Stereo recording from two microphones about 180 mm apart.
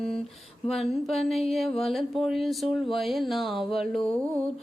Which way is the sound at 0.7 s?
Centre (ahead or behind).